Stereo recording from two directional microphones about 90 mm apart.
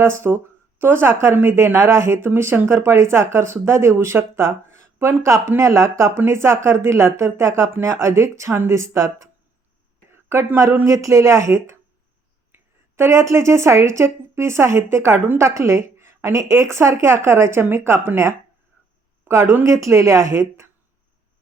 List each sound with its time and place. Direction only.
0.0 s speech: 25° right (ahead or behind)
13.0 s speech: 35° right (ahead or behind)